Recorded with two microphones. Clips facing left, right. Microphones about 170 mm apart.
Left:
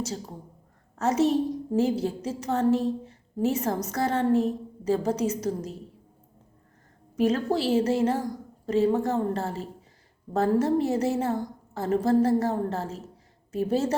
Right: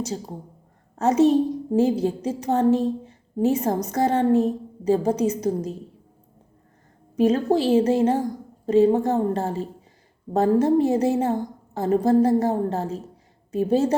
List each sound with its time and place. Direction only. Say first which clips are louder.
0.0 s a woman's voice: right 4 dB; 15° right (ahead or behind)
7.2 s a woman's voice: right 5 dB; 15° right (ahead or behind)